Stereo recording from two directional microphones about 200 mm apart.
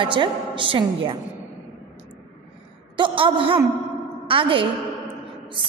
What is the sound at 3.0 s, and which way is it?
A man's voice, 25° right (ahead or behind).